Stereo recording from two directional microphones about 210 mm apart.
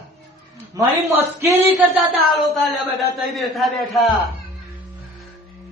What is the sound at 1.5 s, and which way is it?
A man's voice, centre (ahead or behind).